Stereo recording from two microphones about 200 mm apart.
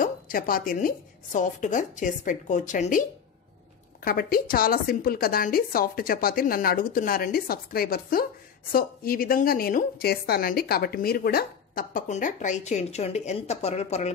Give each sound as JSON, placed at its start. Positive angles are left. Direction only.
{"t": 0.0, "sound": "a woman's voice", "side_deg": 45}